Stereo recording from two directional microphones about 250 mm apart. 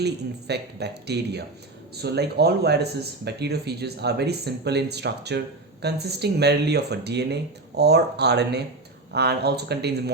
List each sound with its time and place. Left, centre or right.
0.0 s speech: right